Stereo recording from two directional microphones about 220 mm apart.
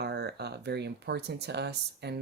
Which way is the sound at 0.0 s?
50° right (ahead or behind).